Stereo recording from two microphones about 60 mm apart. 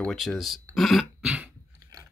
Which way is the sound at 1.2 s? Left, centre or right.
Centre.